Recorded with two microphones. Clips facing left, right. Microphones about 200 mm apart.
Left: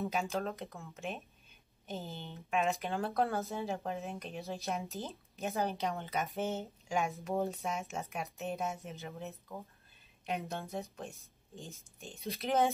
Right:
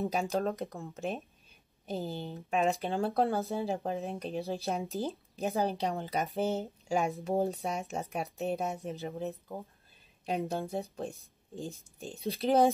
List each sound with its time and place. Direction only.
0.0 s speech: 35° right (ahead or behind)